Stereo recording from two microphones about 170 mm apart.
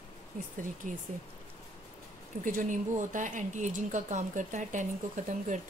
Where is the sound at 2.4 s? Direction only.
50° right (ahead or behind).